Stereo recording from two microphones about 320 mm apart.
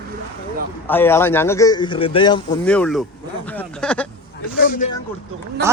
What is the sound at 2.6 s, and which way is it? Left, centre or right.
Speech, centre.